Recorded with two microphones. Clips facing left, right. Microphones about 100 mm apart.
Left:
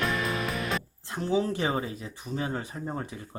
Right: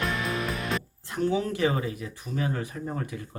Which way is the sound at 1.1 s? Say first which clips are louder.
Right 1 dB; 30° left (ahead or behind).